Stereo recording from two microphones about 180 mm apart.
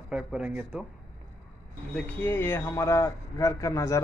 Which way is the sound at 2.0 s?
10° left (ahead or behind).